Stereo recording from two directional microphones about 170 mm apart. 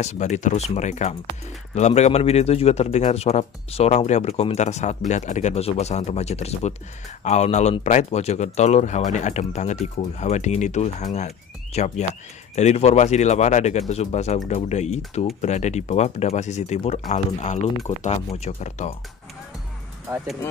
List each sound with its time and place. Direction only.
0.0 s speech: 45° left (ahead or behind)